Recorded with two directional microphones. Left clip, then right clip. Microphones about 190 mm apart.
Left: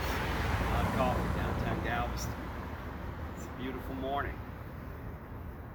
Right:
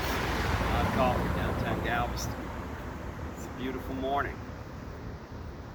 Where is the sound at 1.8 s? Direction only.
10° left (ahead or behind).